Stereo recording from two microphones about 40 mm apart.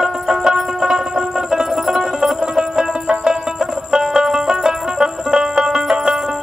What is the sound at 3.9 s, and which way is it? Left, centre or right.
Banjo, centre.